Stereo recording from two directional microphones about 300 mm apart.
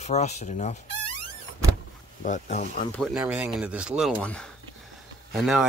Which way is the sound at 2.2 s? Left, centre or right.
Left.